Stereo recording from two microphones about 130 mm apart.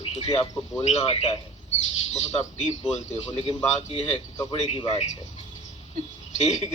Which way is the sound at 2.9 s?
60° left (ahead or behind).